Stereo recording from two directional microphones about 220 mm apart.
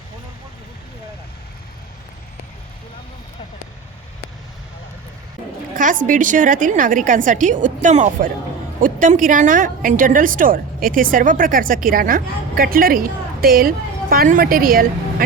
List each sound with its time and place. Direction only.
5.7 s a woman's voice: 35° right (ahead or behind)